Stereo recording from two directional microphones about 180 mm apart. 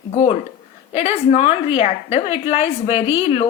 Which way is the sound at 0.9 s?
40° left (ahead or behind).